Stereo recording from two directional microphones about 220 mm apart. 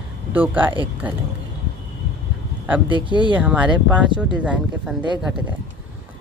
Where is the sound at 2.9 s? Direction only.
20° right (ahead or behind).